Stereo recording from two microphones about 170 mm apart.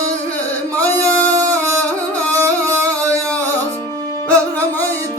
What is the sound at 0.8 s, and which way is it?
Male singing, 10° left (ahead or behind).